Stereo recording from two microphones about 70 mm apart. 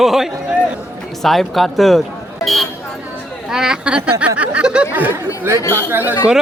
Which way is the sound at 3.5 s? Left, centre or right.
Centre.